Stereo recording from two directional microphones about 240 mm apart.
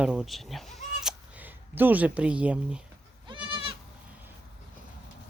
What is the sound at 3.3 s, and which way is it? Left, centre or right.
Goat, right.